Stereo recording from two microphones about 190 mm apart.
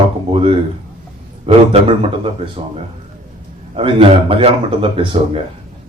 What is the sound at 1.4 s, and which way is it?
Speech, 30° right (ahead or behind).